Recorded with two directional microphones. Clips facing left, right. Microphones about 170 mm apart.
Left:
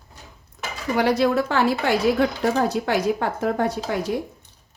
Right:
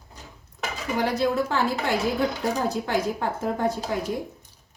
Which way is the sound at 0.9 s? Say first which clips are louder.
Left 4 dB; 75° left (ahead or behind).